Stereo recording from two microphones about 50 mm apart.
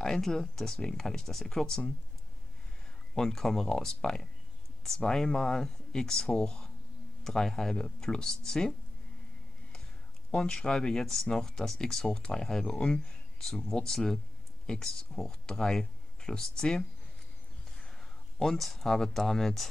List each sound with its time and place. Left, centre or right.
0.0 s speech: centre
3.2 s speech: centre
10.3 s speech: centre
18.4 s speech: centre